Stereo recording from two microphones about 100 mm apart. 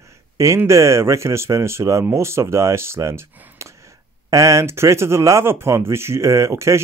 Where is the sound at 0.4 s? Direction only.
30° right (ahead or behind).